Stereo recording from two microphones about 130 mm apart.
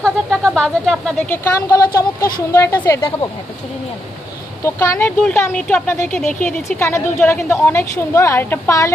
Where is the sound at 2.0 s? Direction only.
30° left (ahead or behind).